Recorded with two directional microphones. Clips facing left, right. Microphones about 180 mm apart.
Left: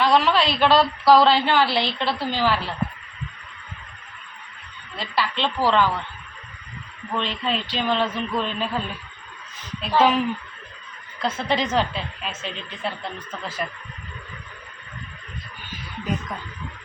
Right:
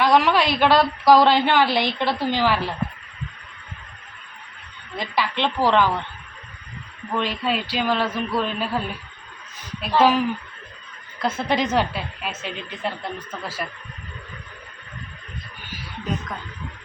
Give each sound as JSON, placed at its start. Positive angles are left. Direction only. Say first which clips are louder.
{"t": 0.0, "sound": "a woman's voice", "louder": "right 1 dB", "side_deg": -15}
{"t": 4.9, "sound": "a woman's voice", "louder": "right 1 dB", "side_deg": -15}
{"t": 7.2, "sound": "a woman's voice", "louder": "right 2 dB", "side_deg": -10}
{"t": 10.0, "sound": "a woman's voice", "louder": "right 1 dB", "side_deg": -5}